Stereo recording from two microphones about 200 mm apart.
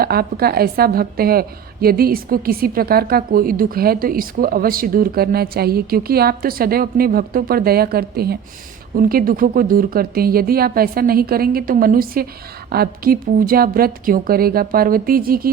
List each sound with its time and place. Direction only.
0.0 s a woman's voice: 50° right (ahead or behind)